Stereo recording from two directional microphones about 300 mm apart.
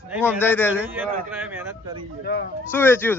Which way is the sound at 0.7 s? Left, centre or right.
Centre.